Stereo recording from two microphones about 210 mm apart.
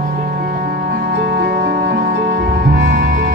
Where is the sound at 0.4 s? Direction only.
45° right (ahead or behind); by 3.1 s 60° right (ahead or behind).